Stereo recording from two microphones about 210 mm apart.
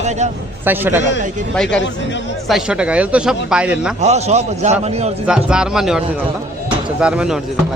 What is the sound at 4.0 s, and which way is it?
Speech, 30° right (ahead or behind).